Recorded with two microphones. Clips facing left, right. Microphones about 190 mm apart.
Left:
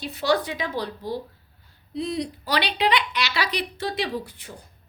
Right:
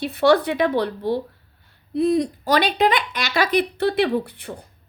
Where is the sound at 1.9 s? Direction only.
50° right (ahead or behind).